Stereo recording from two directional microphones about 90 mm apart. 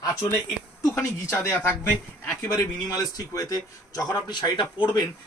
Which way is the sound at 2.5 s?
45° left (ahead or behind).